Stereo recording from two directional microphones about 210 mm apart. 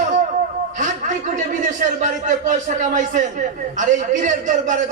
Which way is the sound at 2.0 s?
35° right (ahead or behind).